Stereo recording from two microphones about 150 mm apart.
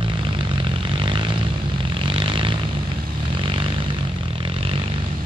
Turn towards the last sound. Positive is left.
turn(degrees=-35)  # may be behind; listen again after turning